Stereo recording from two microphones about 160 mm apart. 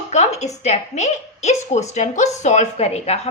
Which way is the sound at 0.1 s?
45° left (ahead or behind).